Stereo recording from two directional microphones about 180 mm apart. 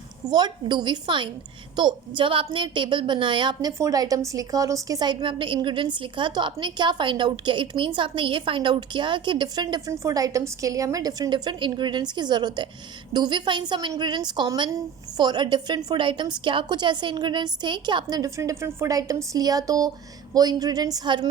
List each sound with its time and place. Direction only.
0.3 s a woman's voice: 25° right (ahead or behind)